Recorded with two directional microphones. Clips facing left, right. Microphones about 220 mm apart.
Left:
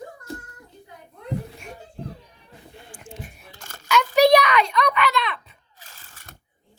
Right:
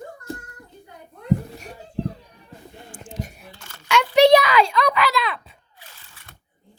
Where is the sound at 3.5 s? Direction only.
45° left (ahead or behind).